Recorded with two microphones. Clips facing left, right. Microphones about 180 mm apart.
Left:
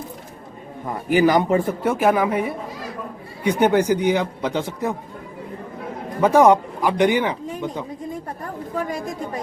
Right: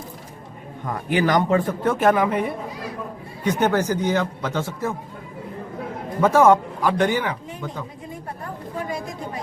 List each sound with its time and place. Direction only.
1.1 s a man's voice: 10° left (ahead or behind)
6.2 s a man's voice: 15° left (ahead or behind)